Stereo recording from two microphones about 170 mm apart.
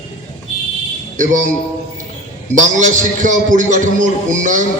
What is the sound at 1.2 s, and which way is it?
Speech, 50° right (ahead or behind).